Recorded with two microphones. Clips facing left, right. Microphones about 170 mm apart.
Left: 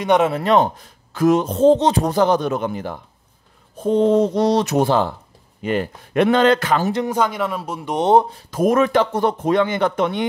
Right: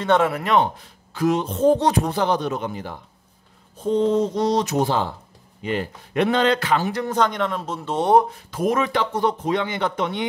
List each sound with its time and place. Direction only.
0.0 s speech: 15° left (ahead or behind)
0.3 s a man's voice: 30° left (ahead or behind)
1.1 s a man's voice: 45° left (ahead or behind)
1.6 s speech: 25° left (ahead or behind)
2.0 s a man's voice: 45° left (ahead or behind)
7.1 s speech: 10° left (ahead or behind); by 8.4 s 25° left (ahead or behind)
8.5 s a man's voice: 45° left (ahead or behind)